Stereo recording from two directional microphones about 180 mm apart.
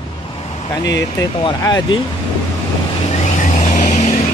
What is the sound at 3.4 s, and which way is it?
Vehicle, 45° left (ahead or behind).